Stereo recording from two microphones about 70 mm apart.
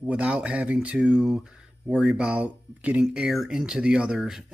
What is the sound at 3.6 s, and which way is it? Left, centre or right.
Speech, centre.